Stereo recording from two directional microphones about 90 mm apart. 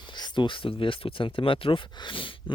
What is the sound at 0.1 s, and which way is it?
Speech, 60° left (ahead or behind).